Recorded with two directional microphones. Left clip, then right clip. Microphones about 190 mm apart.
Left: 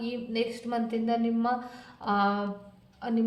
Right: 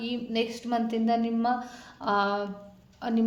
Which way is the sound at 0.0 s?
40° right (ahead or behind).